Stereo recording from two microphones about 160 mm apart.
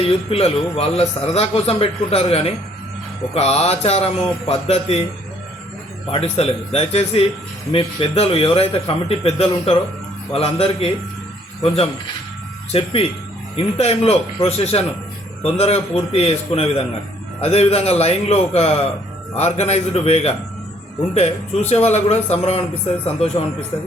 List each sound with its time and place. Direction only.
0.0 s a man's voice: 40° left (ahead or behind)
6.1 s a man's voice: 40° left (ahead or behind)
12.7 s a man's voice: 40° left (ahead or behind)
21.8 s a man's voice: 45° left (ahead or behind)